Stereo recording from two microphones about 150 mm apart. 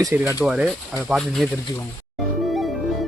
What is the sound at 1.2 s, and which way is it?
Speech, centre (ahead or behind).